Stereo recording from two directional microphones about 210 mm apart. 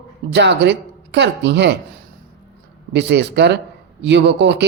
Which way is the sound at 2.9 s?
55° right (ahead or behind).